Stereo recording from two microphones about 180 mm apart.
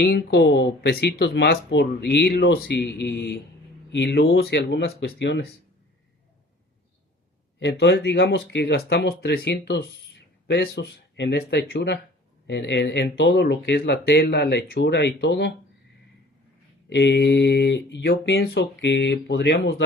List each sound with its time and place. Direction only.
0.0 s speech: 65° left (ahead or behind)
7.6 s speech: 70° left (ahead or behind)
16.9 s speech: 70° left (ahead or behind)